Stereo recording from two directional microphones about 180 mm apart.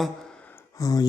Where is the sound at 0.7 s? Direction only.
20° left (ahead or behind).